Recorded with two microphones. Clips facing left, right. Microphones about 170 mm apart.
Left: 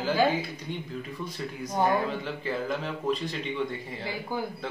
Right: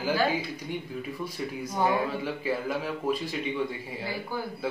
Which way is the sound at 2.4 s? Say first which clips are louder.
Even; 10° right (ahead or behind).